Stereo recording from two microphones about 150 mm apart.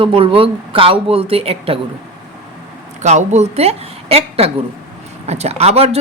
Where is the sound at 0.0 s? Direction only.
35° right (ahead or behind).